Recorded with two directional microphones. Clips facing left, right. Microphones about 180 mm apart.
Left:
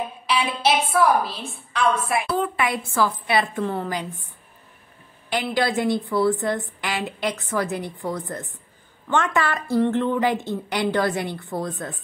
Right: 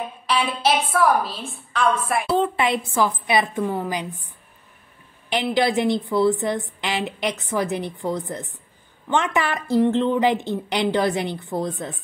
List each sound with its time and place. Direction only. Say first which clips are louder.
0.3 s a woman's voice: right 1 dB; centre (ahead or behind)
2.2 s a woman's voice: right 3 dB; 25° right (ahead or behind)
5.3 s a woman's voice: right 2 dB; 20° right (ahead or behind)